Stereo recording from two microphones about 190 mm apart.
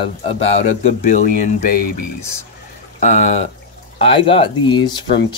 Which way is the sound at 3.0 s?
40° left (ahead or behind).